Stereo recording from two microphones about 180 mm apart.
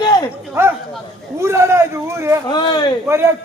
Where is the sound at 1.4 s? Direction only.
15° right (ahead or behind).